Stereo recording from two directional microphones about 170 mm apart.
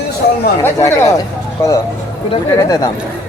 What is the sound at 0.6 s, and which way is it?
Speech, 15° left (ahead or behind).